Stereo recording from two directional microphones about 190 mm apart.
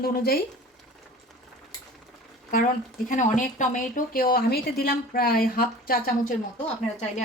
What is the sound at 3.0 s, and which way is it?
Speech, 40° left (ahead or behind).